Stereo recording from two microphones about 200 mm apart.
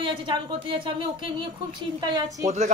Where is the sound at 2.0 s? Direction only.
20° right (ahead or behind).